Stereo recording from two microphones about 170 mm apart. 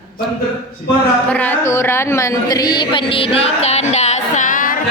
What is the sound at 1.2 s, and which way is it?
Speech, 10° left (ahead or behind).